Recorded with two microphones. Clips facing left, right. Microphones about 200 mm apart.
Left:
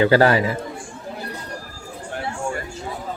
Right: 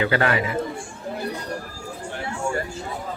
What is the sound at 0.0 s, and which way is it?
Speech, 35° left (ahead or behind).